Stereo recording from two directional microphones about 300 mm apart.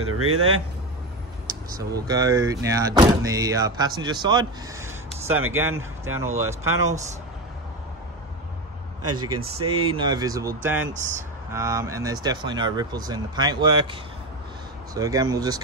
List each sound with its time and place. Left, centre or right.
0.0 s speech: right
1.8 s speech: centre
9.1 s speech: right
9.4 s speech: centre
11.5 s speech: centre
15.0 s speech: centre